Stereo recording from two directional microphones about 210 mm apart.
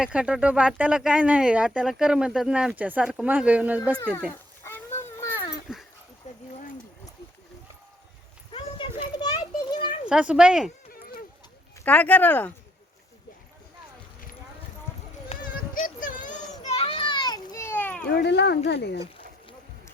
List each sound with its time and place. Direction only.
0.0 s speech: 5° right (ahead or behind)
4.6 s a sound: 10° left (ahead or behind)
6.3 s dog: 35° left (ahead or behind)
8.5 s a sound: 20° left (ahead or behind)
10.1 s speech: 5° right (ahead or behind)
10.9 s a sound: 45° left (ahead or behind)
11.9 s speech: 5° left (ahead or behind)
15.4 s children playing: 40° left (ahead or behind); by 18.0 s 10° left (ahead or behind)
18.1 s speech: 55° left (ahead or behind)